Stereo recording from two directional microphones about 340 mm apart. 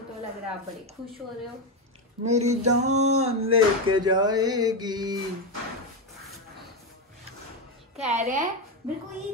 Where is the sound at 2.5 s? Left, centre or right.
Right.